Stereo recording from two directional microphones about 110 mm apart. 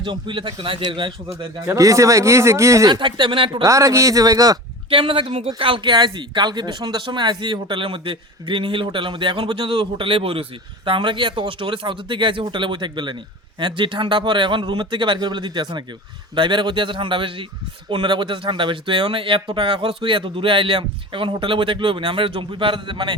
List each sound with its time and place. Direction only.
0.0 s speech: 45° right (ahead or behind)
1.7 s speech: 30° right (ahead or behind)
2.9 s speech: 45° right (ahead or behind)
3.6 s speech: 30° right (ahead or behind)
4.9 s speech: 55° right (ahead or behind)